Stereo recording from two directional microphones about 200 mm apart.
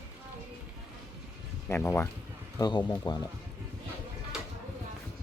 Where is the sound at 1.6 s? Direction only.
10° left (ahead or behind).